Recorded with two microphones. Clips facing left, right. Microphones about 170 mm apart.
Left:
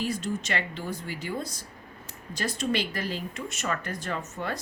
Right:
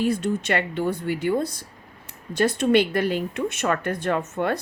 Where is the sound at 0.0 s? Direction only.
55° right (ahead or behind).